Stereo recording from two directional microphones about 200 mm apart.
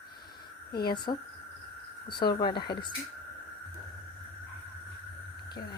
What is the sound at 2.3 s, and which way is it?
Speech, 20° left (ahead or behind).